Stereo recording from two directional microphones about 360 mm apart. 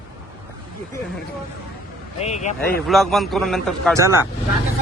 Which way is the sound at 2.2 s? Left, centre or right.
Centre.